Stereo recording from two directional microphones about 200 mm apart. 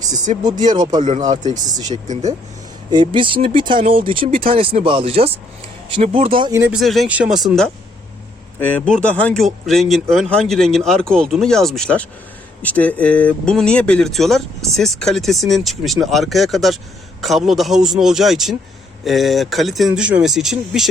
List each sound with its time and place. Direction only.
0.4 s speech: 20° right (ahead or behind)
2.9 s speech: 25° right (ahead or behind)
6.5 s speech: 10° right (ahead or behind)